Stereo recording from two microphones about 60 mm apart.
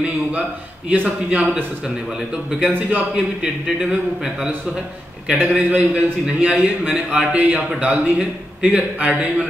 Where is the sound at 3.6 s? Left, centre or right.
Centre.